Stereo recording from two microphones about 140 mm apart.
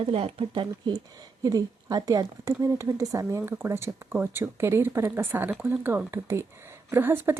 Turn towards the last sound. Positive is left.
turn(degrees=-15)  # may be behind; listen again after turning